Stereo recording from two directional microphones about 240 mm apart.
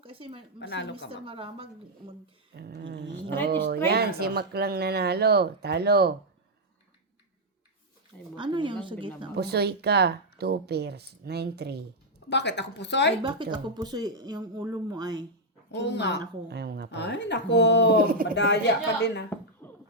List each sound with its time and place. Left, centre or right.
0.0 s speech: right
0.6 s speech: left
1.1 s a woman's voice: right
2.6 s speech: right
8.4 s a woman's voice: centre
9.3 s speech: right
12.3 s speech: left
13.2 s speech: centre
15.7 s speech: left
16.5 s speech: right
16.9 s speech: left
17.9 s speech: right
18.3 s speech: left
19.6 s a sound: centre